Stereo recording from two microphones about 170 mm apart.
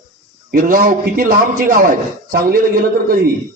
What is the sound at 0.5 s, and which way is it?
A man's voice, 50° right (ahead or behind).